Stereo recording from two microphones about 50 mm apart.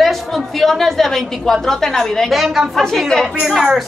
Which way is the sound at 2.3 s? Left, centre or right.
Centre.